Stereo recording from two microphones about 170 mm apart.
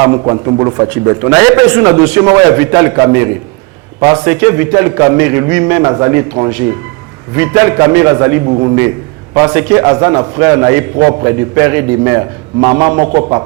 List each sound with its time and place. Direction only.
0.0 s a man's voice: 20° right (ahead or behind)
7.3 s a man's voice: 15° right (ahead or behind)
8.4 s a man's voice: 35° right (ahead or behind)
9.3 s a man's voice: 15° right (ahead or behind)